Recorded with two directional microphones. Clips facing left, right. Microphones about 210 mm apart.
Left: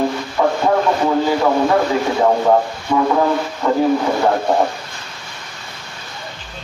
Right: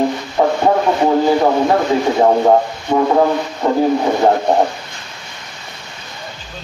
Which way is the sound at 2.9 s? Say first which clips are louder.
Right 2 dB; 35° right (ahead or behind).